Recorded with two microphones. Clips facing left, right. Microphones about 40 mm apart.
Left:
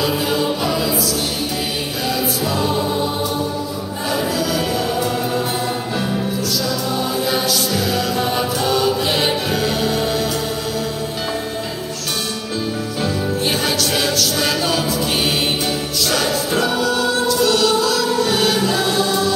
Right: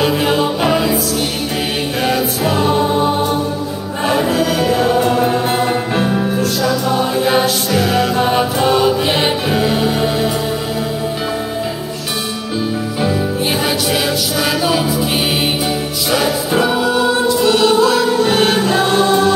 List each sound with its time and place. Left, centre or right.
0.0 s music: right
2.0 s choir: right
4.1 s music: right
14.4 s music: centre
16.1 s music: centre; by 19.3 s right